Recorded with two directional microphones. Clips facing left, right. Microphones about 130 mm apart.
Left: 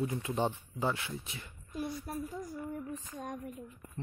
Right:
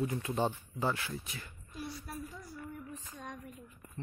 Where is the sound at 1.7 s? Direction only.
50° left (ahead or behind).